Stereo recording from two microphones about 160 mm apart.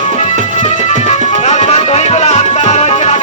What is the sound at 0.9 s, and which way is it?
Music, 45° left (ahead or behind).